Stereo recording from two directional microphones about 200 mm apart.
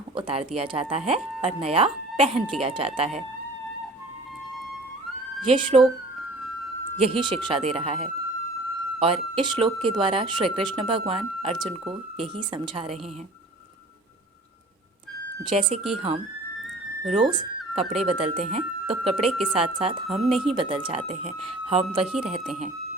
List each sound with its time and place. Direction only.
0.2 s speech: 25° right (ahead or behind)
5.4 s speech: 25° right (ahead or behind)
6.9 s speech: 25° right (ahead or behind)
15.4 s speech: 25° right (ahead or behind)
19.2 s speech: centre (ahead or behind)
19.5 s speech: 30° right (ahead or behind)